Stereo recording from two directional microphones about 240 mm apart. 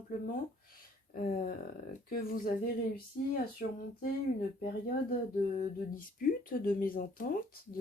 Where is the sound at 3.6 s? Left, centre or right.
Left.